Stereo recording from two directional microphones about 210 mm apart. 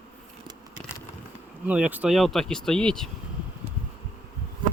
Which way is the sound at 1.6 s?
5° right (ahead or behind).